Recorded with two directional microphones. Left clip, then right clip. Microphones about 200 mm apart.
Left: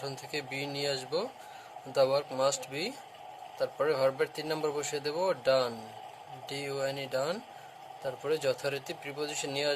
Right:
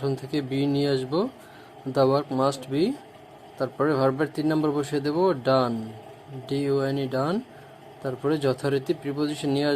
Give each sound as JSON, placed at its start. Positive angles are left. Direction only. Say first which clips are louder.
{"t": 0.0, "sound": "a man's voice", "louder": "right 9 dB", "side_deg": -15}